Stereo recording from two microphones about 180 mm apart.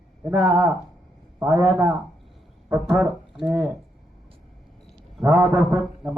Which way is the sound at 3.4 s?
15° right (ahead or behind).